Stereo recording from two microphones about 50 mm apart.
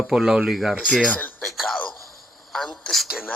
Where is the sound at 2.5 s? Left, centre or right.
Centre.